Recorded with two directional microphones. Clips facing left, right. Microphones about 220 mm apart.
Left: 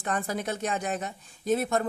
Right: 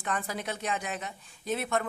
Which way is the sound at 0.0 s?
45° left (ahead or behind).